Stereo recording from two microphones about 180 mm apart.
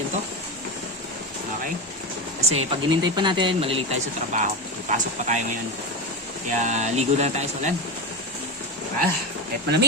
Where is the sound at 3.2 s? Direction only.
25° right (ahead or behind).